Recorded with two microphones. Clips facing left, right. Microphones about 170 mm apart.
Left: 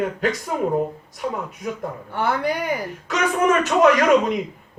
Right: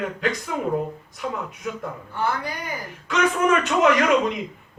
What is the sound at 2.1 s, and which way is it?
Speech, 70° left (ahead or behind).